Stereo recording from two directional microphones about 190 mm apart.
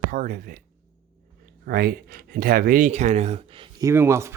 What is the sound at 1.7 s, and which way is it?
Speech, 50° right (ahead or behind).